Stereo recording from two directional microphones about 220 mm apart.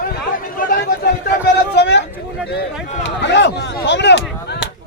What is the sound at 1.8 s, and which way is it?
Vehicle, 50° left (ahead or behind).